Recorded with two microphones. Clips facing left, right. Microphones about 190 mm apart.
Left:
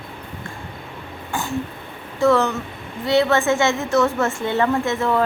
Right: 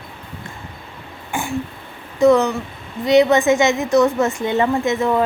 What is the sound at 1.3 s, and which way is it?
Throat clearing, 10° right (ahead or behind).